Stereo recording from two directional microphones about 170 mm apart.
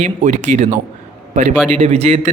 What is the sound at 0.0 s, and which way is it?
A man's voice, 45° right (ahead or behind).